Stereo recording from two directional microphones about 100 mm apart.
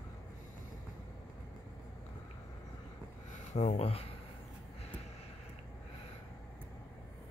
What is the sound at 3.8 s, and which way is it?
Speech, 90° left.